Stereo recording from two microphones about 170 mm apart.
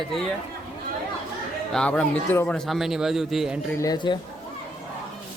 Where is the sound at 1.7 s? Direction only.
5° left (ahead or behind).